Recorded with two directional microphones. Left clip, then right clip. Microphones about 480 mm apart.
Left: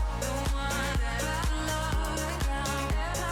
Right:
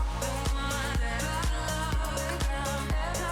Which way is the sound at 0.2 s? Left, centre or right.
Centre.